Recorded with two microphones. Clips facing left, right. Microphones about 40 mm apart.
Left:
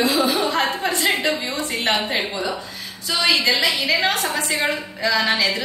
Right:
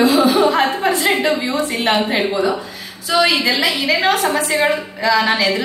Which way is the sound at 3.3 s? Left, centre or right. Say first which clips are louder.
Right 2 dB; centre.